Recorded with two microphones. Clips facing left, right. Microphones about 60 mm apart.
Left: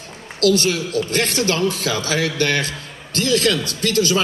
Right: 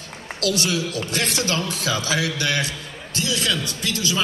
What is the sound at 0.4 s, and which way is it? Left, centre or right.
A man's voice, left.